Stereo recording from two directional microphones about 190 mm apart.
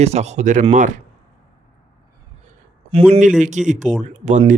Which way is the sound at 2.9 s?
30° right (ahead or behind).